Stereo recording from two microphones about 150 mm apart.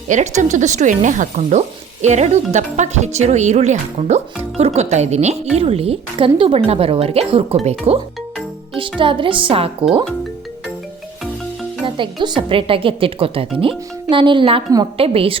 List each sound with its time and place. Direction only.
0.1 s a woman's voice: 55° right (ahead or behind); by 9.7 s 40° right (ahead or behind)
11.9 s a woman's voice: 30° right (ahead or behind)